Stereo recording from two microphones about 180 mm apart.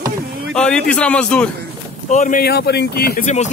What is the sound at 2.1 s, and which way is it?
Speech, 45° left (ahead or behind).